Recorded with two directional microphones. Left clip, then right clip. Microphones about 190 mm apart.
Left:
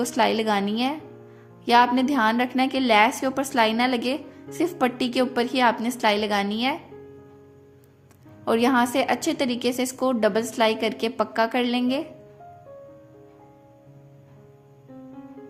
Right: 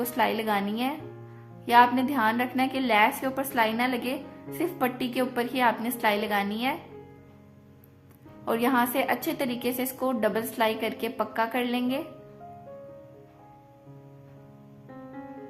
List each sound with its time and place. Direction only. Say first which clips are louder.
0.0 s a woman's voice: left 4 dB; 25° left (ahead or behind)
8.4 s a woman's voice: left 4 dB; 25° left (ahead or behind)